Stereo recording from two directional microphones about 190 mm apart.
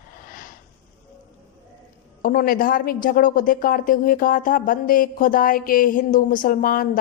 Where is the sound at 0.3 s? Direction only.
45° left (ahead or behind).